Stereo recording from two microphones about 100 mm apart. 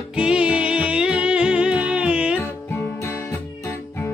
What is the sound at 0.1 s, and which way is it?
Music, 10° right (ahead or behind).